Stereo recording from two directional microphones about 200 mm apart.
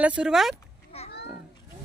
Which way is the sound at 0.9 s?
30° left (ahead or behind).